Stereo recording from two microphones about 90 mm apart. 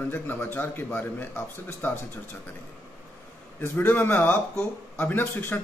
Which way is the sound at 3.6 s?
20° left (ahead or behind).